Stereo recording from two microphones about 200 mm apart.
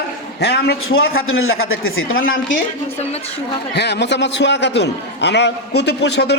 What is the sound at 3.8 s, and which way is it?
A man's voice, 60° left (ahead or behind).